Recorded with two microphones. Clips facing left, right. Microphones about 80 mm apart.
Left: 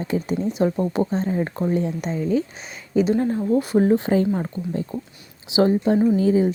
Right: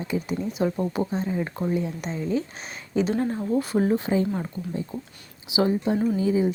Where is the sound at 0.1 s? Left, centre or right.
Left.